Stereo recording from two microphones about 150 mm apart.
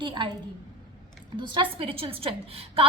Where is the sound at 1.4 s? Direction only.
35° right (ahead or behind).